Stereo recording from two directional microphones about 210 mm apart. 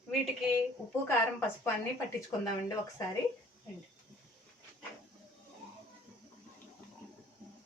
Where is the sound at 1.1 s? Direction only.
10° left (ahead or behind).